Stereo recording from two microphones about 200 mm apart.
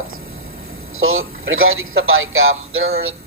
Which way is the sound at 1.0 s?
90° right.